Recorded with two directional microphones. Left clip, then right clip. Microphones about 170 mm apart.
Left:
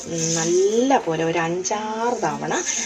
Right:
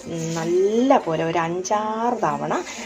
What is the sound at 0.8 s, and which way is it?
Speech, centre (ahead or behind).